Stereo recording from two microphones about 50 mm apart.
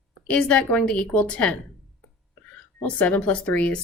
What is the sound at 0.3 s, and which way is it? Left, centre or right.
Speech, left.